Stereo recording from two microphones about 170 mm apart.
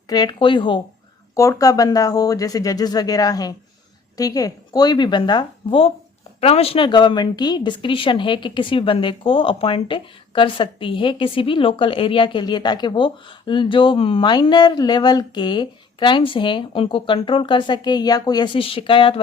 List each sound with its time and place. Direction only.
0.1 s a woman's voice: 25° left (ahead or behind)